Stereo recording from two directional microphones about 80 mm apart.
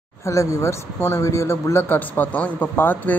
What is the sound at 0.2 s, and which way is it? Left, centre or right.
Speech, left.